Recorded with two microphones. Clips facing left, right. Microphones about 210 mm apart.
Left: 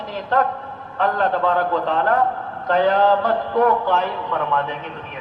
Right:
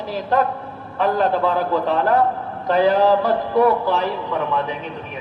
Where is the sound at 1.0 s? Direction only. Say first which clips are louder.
Right 2 dB; 10° right (ahead or behind).